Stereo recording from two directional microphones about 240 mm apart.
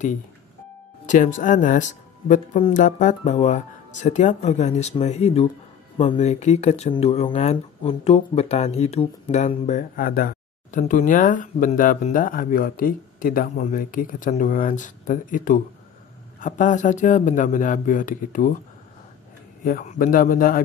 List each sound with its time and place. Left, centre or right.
1.0 s speech: left
19.6 s speech: left